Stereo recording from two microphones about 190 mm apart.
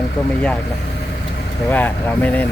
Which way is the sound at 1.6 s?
10° left (ahead or behind).